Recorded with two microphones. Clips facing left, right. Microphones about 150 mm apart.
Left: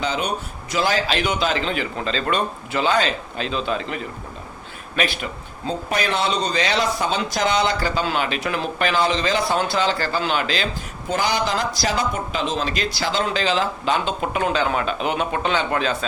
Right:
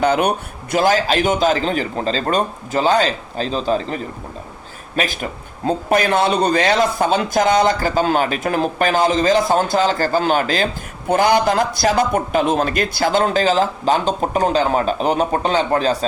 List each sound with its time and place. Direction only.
0.0 s a man's voice: 55° right (ahead or behind); by 16.0 s 35° right (ahead or behind)